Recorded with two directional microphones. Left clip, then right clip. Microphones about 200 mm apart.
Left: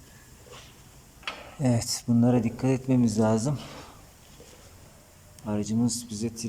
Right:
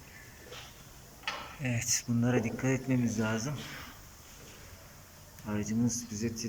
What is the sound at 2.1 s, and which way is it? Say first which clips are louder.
Speech: left 10 dB; 15° left (ahead or behind).